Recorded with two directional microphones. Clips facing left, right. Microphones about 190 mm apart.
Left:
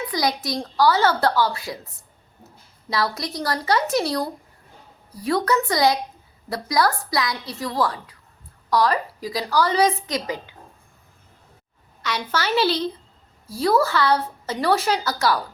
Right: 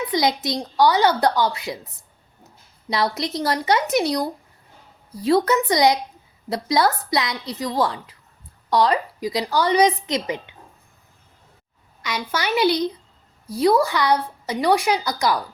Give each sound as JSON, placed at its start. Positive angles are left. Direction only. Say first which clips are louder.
{"t": 0.1, "sound": "speech", "louder": "right 2 dB", "side_deg": -20}
{"t": 2.9, "sound": "speech", "louder": "right 2 dB", "side_deg": -20}
{"t": 12.0, "sound": "a woman's voice", "louder": "even", "side_deg": -10}